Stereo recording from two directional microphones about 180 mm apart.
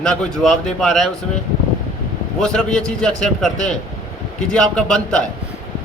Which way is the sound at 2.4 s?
5° left (ahead or behind).